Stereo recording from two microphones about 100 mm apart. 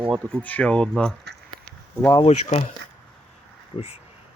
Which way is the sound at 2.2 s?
90° left.